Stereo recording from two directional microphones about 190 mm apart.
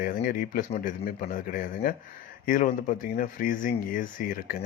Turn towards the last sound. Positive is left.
turn(degrees=45)  # may be behind; listen again after turning